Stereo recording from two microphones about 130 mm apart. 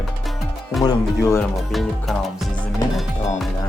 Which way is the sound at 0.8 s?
25° left (ahead or behind).